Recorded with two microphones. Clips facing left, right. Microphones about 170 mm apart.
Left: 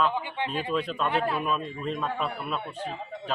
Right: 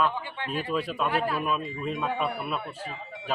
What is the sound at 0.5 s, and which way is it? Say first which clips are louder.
Speech: right 2 dB; 5° right (ahead or behind).